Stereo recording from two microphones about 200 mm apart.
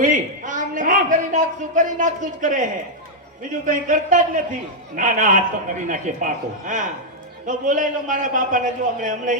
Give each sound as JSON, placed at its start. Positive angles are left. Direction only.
{"t": 0.0, "sound": "a man's voice", "side_deg": -40}
{"t": 3.7, "sound": "a man's voice", "side_deg": -40}